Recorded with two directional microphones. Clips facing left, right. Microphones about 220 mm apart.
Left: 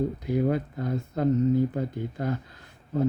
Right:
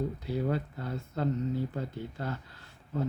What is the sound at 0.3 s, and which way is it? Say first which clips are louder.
Speech: left 6 dB; 15° left (ahead or behind).